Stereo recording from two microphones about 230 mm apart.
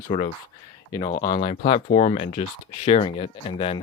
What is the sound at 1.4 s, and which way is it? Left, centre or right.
Speech, left.